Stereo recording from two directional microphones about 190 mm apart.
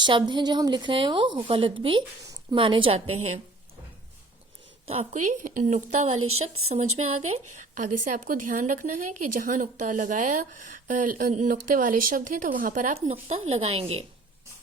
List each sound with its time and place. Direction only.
0.0 s a woman's voice: 25° right (ahead or behind)
4.9 s a woman's voice: 35° right (ahead or behind)
6.1 s speech: 90° right
6.7 s speech: 35° right (ahead or behind)